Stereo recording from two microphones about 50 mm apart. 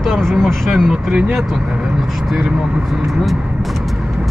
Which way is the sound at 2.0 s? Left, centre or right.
Centre.